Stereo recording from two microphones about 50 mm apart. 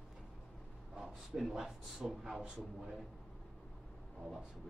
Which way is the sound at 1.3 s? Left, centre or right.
Centre.